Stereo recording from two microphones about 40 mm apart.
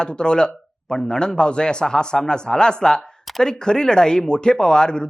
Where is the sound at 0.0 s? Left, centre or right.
Left.